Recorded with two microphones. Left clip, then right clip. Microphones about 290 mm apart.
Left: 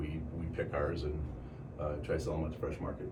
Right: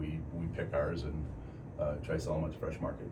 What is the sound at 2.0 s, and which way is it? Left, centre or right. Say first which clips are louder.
Speech: even; centre.